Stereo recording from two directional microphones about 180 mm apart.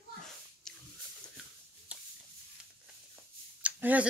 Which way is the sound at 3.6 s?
10° right (ahead or behind).